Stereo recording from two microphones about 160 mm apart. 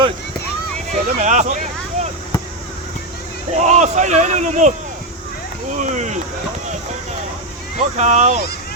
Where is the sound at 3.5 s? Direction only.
50° right (ahead or behind).